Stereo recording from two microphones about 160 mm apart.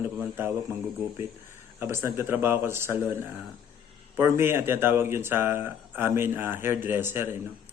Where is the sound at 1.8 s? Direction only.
15° right (ahead or behind).